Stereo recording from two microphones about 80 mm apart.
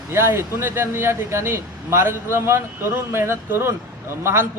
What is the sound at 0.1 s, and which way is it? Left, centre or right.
A man's voice, right.